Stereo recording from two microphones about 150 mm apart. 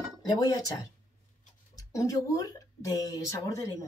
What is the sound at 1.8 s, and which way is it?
A woman's voice, 20° left (ahead or behind).